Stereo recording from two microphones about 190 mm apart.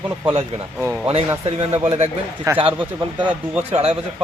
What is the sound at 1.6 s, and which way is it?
Speech, 30° right (ahead or behind).